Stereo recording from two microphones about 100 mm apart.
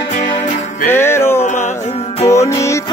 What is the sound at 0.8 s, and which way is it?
Music, 25° left (ahead or behind).